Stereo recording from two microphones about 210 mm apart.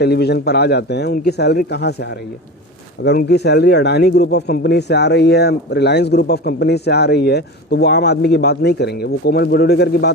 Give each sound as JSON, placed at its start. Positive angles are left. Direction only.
{"t": 0.0, "sound": "speech", "side_deg": 50}